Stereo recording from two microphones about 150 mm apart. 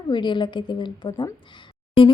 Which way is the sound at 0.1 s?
30° left (ahead or behind).